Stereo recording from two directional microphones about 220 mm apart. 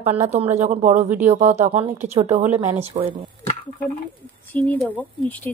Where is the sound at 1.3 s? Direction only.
30° right (ahead or behind).